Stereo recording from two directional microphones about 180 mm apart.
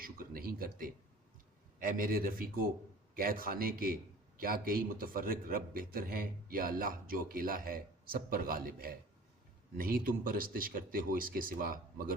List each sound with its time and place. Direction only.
0.0 s a man's voice: 55° right (ahead or behind)